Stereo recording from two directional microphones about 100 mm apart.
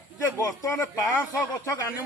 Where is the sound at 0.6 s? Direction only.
30° left (ahead or behind).